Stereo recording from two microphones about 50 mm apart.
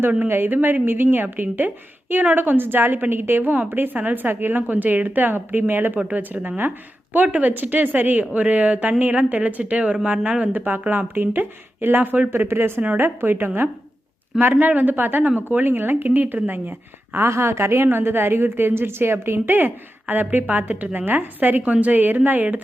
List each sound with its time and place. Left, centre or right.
0.3 s a woman's voice: right
10.5 s a woman's voice: right
16.0 s a woman's voice: right
17.2 s a woman's voice: right
17.8 s a woman's voice: right